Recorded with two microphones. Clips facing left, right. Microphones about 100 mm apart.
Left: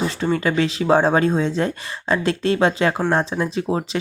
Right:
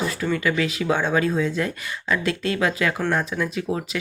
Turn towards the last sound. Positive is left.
turn(degrees=30)  # may be behind; listen again after turning